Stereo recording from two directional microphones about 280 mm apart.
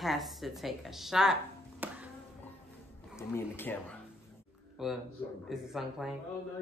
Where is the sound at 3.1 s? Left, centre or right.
Centre.